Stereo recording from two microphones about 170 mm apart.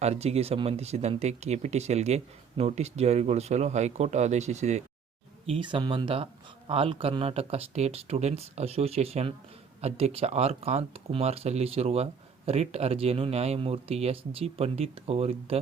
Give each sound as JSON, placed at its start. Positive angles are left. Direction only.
{"t": 0.0, "sound": "speech", "side_deg": -40}
{"t": 5.5, "sound": "speech", "side_deg": -30}